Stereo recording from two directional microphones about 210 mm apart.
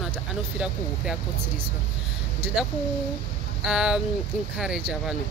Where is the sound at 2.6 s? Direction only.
Centre (ahead or behind).